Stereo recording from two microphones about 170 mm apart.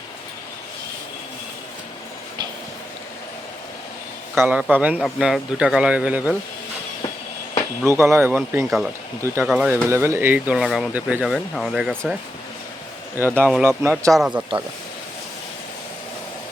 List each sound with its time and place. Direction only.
4.4 s a man's voice: 10° right (ahead or behind)
4.9 s speech: centre (ahead or behind)
7.9 s speech: 15° right (ahead or behind)
13.2 s speech: 10° left (ahead or behind)
13.6 s speech: 15° right (ahead or behind)
13.9 s speech: centre (ahead or behind)